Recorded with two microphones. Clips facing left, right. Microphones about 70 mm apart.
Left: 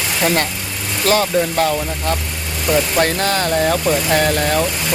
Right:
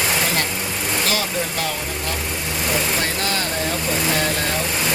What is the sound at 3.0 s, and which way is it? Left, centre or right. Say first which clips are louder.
Speech: left 7 dB; left.